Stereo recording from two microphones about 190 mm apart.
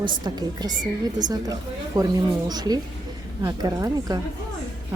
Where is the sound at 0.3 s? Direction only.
20° right (ahead or behind).